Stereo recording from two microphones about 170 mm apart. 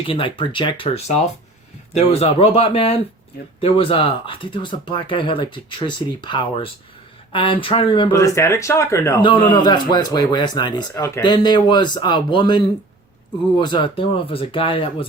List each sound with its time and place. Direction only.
0.1 s speech: 30° left (ahead or behind)
8.1 s speech: 20° left (ahead or behind)